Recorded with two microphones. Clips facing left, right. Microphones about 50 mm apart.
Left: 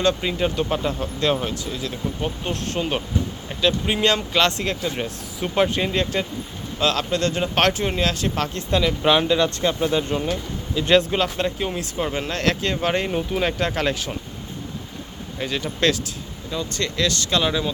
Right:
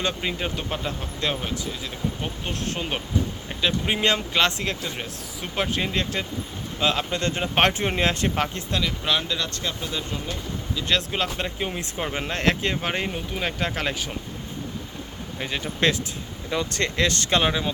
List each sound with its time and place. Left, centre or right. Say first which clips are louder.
0.0 s speech: left 6 dB; centre
6.7 s speech: left 3 dB; centre
7.7 s speech: left 1 dB; right
9.0 s speech: left 10 dB; left
11.1 s speech: left 5 dB; centre
12.1 s speech: right 1 dB; right
13.1 s speech: left 6 dB; centre
13.6 s speech: left 4 dB; centre
15.4 s speech: left 2 dB; centre
16.5 s speech: right 1 dB; right
16.8 s speech: left 2 dB; right